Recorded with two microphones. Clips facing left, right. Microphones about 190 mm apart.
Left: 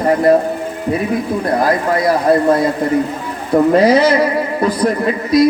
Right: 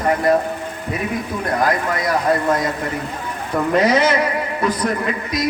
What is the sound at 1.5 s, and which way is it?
A man's voice, 35° left (ahead or behind).